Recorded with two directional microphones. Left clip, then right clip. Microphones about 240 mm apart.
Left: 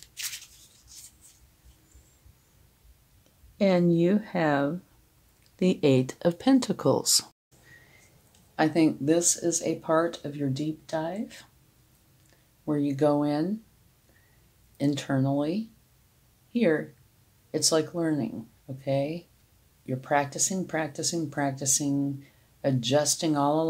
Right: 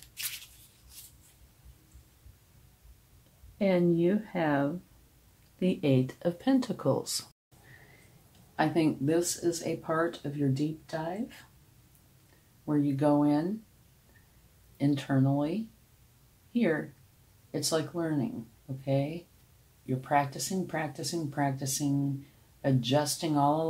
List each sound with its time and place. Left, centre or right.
0.1 s a sound: centre
3.5 s speech: left
8.5 s speech: left
12.6 s speech: left
14.8 s speech: left
17.5 s speech: left